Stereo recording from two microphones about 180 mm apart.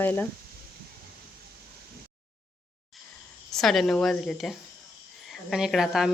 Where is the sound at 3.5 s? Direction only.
Centre (ahead or behind).